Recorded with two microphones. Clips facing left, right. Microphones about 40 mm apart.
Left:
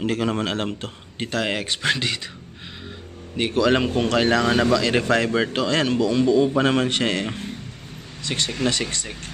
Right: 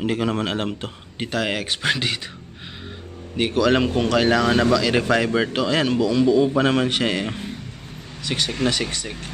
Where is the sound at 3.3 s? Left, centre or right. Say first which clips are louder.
Right 1 dB; centre.